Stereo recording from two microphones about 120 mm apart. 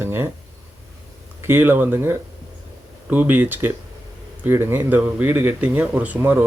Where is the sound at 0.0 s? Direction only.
20° right (ahead or behind).